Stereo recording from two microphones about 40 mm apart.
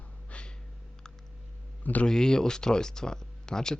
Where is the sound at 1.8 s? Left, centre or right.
Left.